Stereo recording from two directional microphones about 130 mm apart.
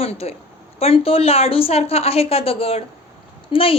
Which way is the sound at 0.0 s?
50° left (ahead or behind).